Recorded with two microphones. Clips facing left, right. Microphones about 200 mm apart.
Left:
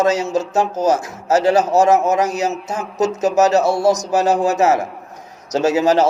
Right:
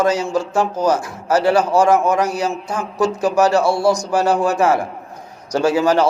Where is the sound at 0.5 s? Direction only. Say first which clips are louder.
Left 1 dB; 45° left (ahead or behind).